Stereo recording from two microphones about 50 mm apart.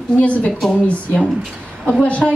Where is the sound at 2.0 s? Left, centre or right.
Left.